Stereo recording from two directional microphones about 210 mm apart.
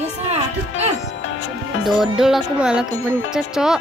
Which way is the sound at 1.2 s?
70° left (ahead or behind).